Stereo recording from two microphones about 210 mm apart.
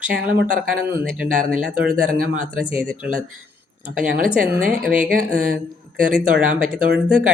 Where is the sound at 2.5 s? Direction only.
5° right (ahead or behind).